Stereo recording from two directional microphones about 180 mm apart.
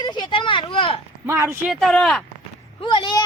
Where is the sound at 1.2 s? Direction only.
15° right (ahead or behind).